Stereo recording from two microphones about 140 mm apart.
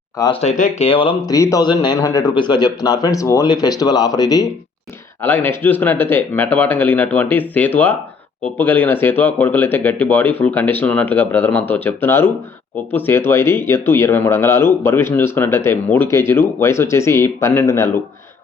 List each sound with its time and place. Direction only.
0.4 s speech: 60° left (ahead or behind)
0.9 s speech: 40° left (ahead or behind)
1.3 s speech: 25° left (ahead or behind)
5.2 s speech: 15° left (ahead or behind)